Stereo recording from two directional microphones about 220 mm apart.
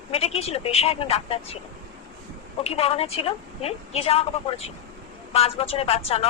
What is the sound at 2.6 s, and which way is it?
Speech, 25° left (ahead or behind).